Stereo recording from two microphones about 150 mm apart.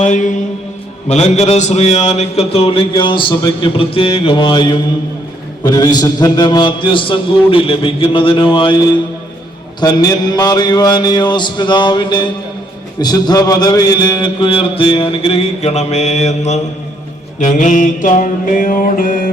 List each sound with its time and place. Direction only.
0.0 s mantra: 55° left (ahead or behind)
1.0 s a man's voice: 45° left (ahead or behind)
9.8 s mantra: 25° left (ahead or behind)
13.0 s a man's voice: 25° left (ahead or behind); by 16.6 s 45° left (ahead or behind)
17.4 s mantra: 60° left (ahead or behind)